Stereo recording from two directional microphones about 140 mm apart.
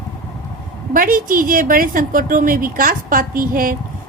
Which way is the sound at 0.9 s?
85° right.